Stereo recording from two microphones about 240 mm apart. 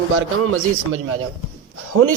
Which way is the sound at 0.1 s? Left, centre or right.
Right.